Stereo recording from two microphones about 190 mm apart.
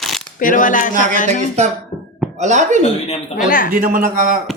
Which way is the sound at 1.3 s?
35° right (ahead or behind).